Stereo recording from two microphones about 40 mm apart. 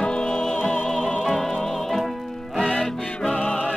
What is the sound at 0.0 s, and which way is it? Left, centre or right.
Music, left.